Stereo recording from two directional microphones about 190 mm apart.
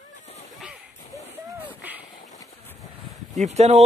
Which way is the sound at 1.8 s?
10° right (ahead or behind).